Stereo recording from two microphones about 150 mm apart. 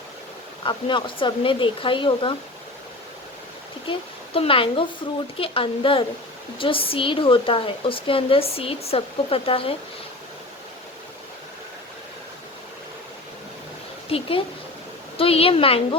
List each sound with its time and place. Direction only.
0.6 s speech: 30° left (ahead or behind)
3.9 s speech: 35° left (ahead or behind)
14.1 s speech: 40° left (ahead or behind)